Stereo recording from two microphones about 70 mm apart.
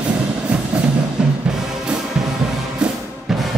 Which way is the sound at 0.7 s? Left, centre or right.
Centre.